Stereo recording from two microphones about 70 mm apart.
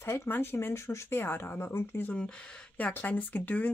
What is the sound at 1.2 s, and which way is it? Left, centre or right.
Speech, left.